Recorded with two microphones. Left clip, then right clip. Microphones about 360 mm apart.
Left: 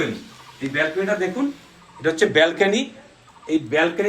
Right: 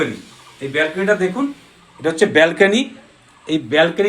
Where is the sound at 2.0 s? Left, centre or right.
Centre.